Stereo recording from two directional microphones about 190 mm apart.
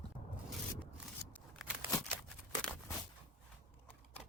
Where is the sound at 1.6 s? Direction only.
Centre (ahead or behind).